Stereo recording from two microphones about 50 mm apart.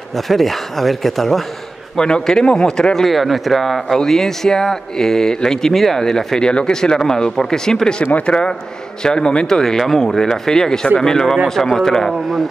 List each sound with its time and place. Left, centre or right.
0.1 s a man's voice: centre
2.0 s speech: centre